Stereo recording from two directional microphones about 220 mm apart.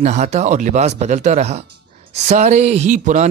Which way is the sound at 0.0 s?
30° right (ahead or behind).